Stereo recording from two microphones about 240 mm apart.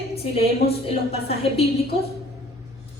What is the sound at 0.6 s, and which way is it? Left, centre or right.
A woman's voice, left.